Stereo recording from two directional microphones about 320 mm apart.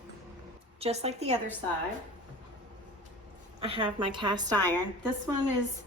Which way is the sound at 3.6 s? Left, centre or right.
Centre.